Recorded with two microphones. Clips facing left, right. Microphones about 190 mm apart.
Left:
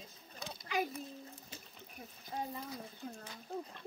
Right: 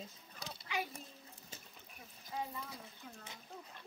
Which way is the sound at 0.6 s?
40° left (ahead or behind).